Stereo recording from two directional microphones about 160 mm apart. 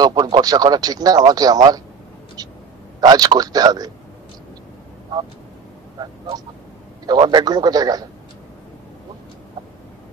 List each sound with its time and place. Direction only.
0.0 s speech: 25° right (ahead or behind)
3.0 s a man's voice: 25° right (ahead or behind)
6.0 s vehicle: 20° right (ahead or behind)
7.1 s a man's voice: 25° right (ahead or behind)